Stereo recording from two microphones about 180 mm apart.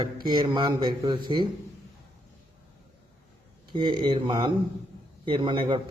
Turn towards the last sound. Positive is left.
turn(degrees=-25)  # may be behind; listen again after turning